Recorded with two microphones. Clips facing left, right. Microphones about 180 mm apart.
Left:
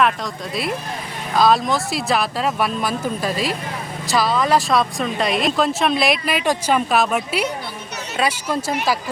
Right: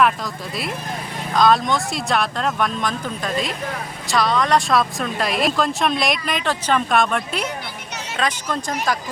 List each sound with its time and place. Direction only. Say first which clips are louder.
1.4 s speech: even; centre (ahead or behind)